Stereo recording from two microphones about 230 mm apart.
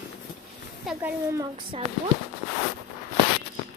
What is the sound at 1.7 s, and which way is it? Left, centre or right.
Speech, right.